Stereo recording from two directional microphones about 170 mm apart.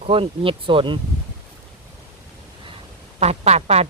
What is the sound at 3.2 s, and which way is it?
Speech, 40° right (ahead or behind).